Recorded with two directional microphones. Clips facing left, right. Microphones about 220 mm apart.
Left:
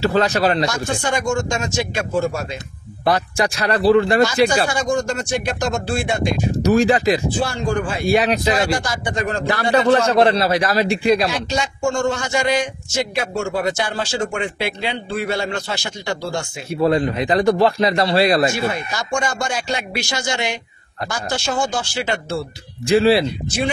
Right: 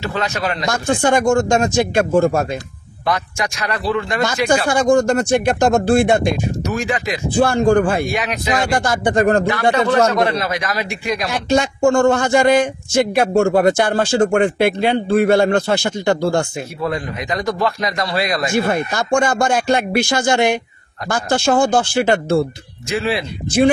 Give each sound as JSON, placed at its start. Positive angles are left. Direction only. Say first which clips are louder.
{"t": 0.0, "sound": "a man's voice", "louder": "left 5 dB", "side_deg": 35}
{"t": 0.7, "sound": "a man's voice", "louder": "right 6 dB", "side_deg": -55}
{"t": 3.1, "sound": "a man's voice", "louder": "left 3 dB", "side_deg": 35}
{"t": 4.6, "sound": "a man's voice", "louder": "right 6 dB", "side_deg": -55}
{"t": 6.6, "sound": "a man's voice", "louder": "left 6 dB", "side_deg": 35}
{"t": 7.2, "sound": "a man's voice", "louder": "right 7 dB", "side_deg": -50}
{"t": 8.1, "sound": "a man's voice", "louder": "left 4 dB", "side_deg": 35}
{"t": 8.7, "sound": "a man's voice", "louder": "right 7 dB", "side_deg": -55}
{"t": 9.5, "sound": "a man's voice", "louder": "left 1 dB", "side_deg": 35}
{"t": 11.2, "sound": "a man's voice", "louder": "right 5 dB", "side_deg": -55}
{"t": 16.8, "sound": "a man's voice", "louder": "left 7 dB", "side_deg": 30}
{"t": 18.5, "sound": "a man's voice", "louder": "right 5 dB", "side_deg": -50}
{"t": 22.8, "sound": "a man's voice", "louder": "left 6 dB", "side_deg": 30}